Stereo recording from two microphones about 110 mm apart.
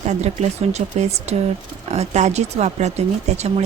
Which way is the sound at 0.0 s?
90° right.